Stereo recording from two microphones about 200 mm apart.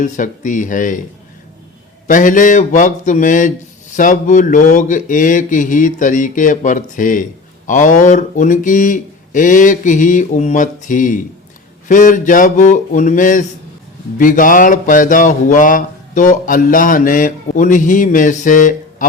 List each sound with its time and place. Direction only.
0.0 s speech: 40° left (ahead or behind)
2.0 s speech: 40° left (ahead or behind)